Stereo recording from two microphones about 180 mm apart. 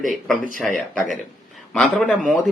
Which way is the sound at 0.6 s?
Centre (ahead or behind).